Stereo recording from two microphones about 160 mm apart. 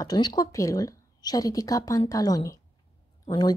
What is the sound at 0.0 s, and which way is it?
A woman's voice, 25° left (ahead or behind).